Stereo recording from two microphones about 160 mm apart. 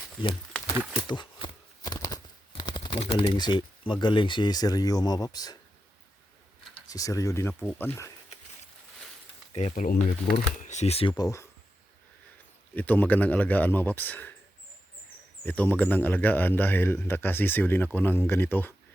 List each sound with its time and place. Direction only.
0.8 s speech: 10° right (ahead or behind)
1.0 s a sound: 30° left (ahead or behind)
2.5 s speech: 30° left (ahead or behind)
6.8 s speech: 20° left (ahead or behind)
9.6 s speech: 50° left (ahead or behind)
11.2 s speech: 20° left (ahead or behind)
12.7 s a man's voice: 10° left (ahead or behind)
15.4 s a man's voice: 10° left (ahead or behind)